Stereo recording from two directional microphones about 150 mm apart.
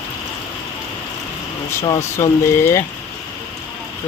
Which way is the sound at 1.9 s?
20° left (ahead or behind).